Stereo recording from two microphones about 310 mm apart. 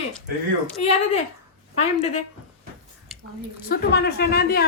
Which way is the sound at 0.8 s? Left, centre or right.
Left.